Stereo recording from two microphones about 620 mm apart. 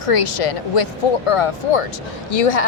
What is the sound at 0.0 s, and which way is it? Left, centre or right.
Speech, left.